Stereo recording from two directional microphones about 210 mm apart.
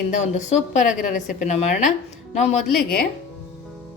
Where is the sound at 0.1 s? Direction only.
35° left (ahead or behind).